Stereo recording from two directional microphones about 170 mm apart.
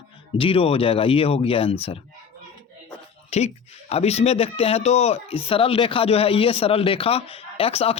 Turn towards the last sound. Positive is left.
turn(degrees=35)  # may be behind; listen again after turning